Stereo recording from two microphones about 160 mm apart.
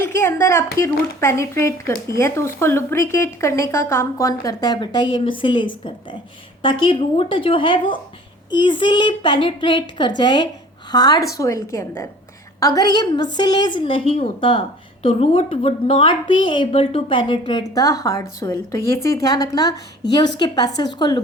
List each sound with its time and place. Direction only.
0.0 s a woman's voice: 15° left (ahead or behind)